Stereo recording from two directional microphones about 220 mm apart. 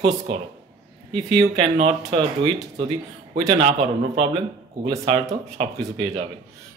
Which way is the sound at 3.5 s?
30° right (ahead or behind).